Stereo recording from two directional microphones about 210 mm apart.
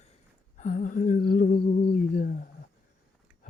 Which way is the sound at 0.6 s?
35° left (ahead or behind).